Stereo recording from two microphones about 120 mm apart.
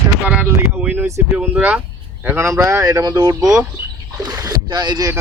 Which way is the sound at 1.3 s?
10° right (ahead or behind).